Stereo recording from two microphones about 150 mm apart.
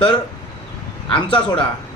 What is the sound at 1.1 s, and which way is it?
Speech, 30° left (ahead or behind).